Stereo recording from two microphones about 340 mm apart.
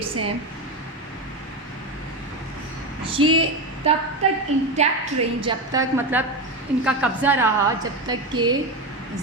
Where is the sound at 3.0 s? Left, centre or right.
Centre.